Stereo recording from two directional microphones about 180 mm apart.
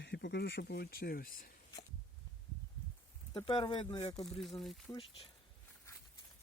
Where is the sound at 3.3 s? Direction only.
30° left (ahead or behind).